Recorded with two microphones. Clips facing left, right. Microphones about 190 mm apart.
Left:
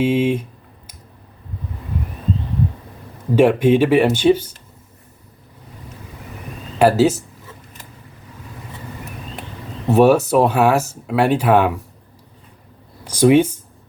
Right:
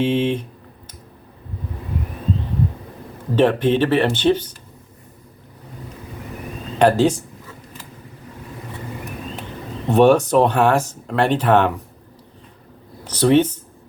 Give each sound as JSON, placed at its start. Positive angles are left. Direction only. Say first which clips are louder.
{"t": 0.0, "sound": "speech", "louder": "left 2 dB", "side_deg": 10}
{"t": 3.3, "sound": "speech", "louder": "left 3 dB", "side_deg": 10}
{"t": 6.7, "sound": "speech", "louder": "left 1 dB", "side_deg": 5}
{"t": 9.9, "sound": "speech", "louder": "left 1 dB", "side_deg": 5}
{"t": 13.1, "sound": "speech", "louder": "left 2 dB", "side_deg": 10}